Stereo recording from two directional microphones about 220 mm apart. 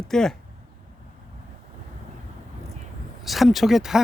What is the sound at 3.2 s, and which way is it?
Speech, centre (ahead or behind).